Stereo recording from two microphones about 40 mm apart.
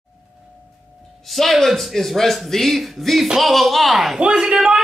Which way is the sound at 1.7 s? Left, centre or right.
Centre.